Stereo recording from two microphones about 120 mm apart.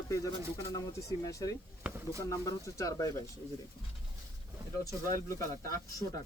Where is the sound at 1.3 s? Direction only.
30° left (ahead or behind).